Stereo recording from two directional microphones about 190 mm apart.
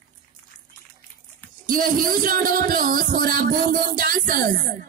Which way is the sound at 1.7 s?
50° right (ahead or behind).